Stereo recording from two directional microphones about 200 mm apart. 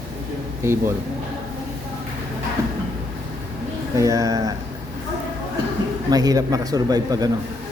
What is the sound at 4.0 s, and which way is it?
Speech, 15° right (ahead or behind).